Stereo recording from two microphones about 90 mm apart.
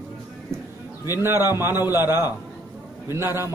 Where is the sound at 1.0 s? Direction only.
30° right (ahead or behind).